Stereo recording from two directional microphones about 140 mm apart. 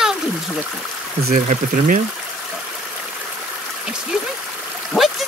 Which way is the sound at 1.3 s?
65° right (ahead or behind).